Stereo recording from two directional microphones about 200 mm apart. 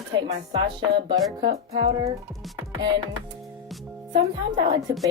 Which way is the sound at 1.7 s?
20° right (ahead or behind).